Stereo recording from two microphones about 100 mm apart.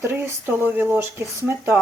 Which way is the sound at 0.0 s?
25° right (ahead or behind).